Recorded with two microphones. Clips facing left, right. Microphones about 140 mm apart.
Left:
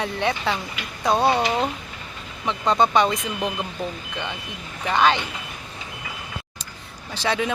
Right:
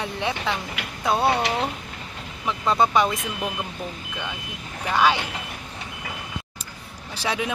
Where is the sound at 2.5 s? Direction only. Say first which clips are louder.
Left 1 dB; 5° right (ahead or behind).